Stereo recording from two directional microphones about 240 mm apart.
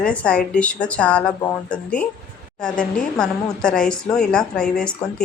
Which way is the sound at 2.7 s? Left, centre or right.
Left.